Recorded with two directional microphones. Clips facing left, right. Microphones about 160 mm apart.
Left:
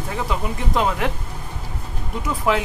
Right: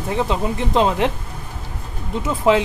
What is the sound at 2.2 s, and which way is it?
Speech, 25° right (ahead or behind).